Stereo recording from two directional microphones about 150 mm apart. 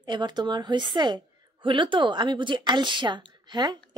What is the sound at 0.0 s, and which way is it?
A woman's voice, 30° right (ahead or behind).